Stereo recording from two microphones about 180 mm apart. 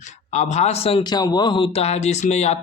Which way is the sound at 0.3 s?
40° left (ahead or behind).